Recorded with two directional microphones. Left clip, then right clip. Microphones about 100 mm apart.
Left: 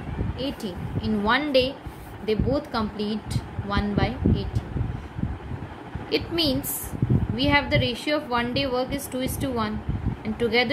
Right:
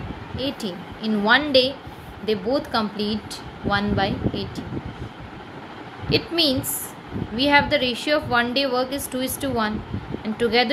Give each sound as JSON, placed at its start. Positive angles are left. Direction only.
{"t": 0.4, "sound": "speech", "side_deg": -30}
{"t": 1.2, "sound": "a woman's voice", "side_deg": -15}
{"t": 6.0, "sound": "a woman's voice", "side_deg": -20}